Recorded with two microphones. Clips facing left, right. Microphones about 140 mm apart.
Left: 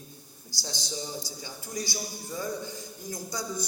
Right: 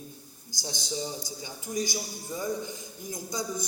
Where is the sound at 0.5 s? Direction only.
15° right (ahead or behind).